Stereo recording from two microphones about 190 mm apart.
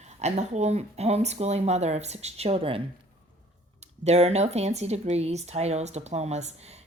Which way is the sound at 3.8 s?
35° right (ahead or behind).